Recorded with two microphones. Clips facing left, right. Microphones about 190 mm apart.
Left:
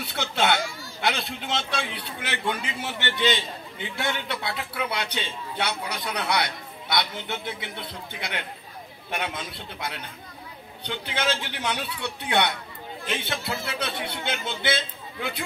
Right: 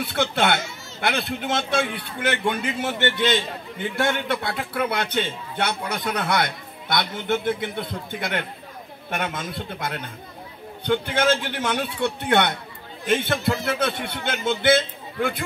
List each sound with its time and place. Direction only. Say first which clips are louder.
0.0 s a child's voice: right 4 dB; 55° right (ahead or behind)